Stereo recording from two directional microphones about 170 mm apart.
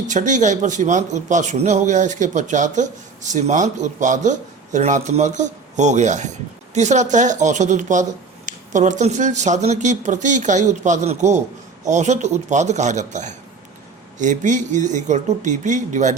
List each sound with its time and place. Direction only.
0.1 s a man's voice: 45° right (ahead or behind)